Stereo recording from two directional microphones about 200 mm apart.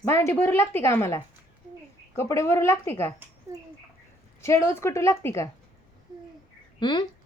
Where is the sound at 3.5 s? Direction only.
15° right (ahead or behind).